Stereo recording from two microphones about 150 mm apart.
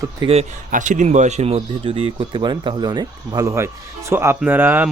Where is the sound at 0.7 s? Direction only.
55° right (ahead or behind).